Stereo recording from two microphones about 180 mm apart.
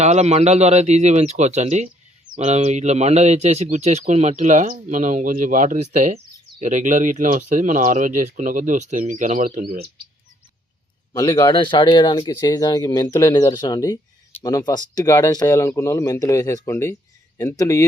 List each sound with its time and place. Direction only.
0.0 s speech: 40° right (ahead or behind)
11.1 s speech: 20° left (ahead or behind)